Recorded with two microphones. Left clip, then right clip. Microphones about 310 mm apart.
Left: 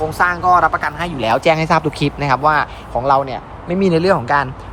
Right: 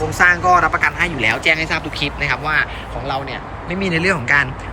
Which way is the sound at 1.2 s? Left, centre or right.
Centre.